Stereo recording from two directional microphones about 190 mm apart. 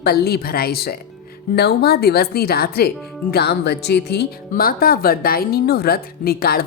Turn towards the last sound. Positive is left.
turn(degrees=50)  # may be behind; listen again after turning